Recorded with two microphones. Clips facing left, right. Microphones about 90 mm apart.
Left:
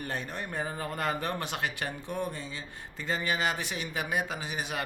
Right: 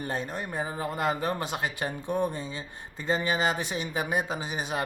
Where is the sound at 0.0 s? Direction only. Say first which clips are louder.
Right 3 dB; 20° right (ahead or behind).